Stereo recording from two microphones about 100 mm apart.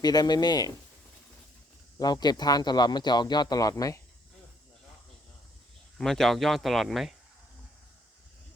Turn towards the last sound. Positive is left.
turn(degrees=0)  # may be behind; listen again after turning